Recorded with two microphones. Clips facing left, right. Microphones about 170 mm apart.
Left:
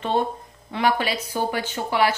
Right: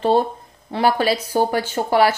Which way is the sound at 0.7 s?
35° right (ahead or behind).